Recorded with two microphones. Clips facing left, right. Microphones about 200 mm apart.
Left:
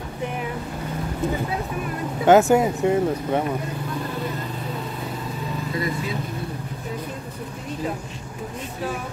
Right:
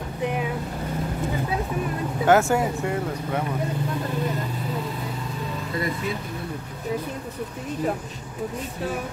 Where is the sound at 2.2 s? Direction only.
20° left (ahead or behind).